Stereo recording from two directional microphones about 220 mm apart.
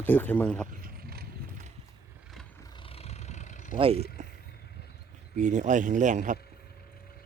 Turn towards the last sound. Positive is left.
turn(degrees=-35)  # may be behind; listen again after turning